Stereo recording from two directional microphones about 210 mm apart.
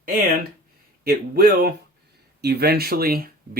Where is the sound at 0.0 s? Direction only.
40° right (ahead or behind).